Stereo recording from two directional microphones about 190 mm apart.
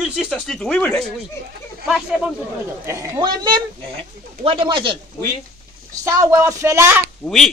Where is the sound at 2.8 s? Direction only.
15° right (ahead or behind).